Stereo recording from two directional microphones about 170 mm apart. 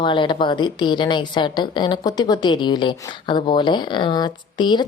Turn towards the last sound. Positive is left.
turn(degrees=25)  # may be behind; listen again after turning